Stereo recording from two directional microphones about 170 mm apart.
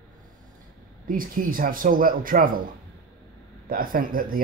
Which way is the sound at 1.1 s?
55° right (ahead or behind).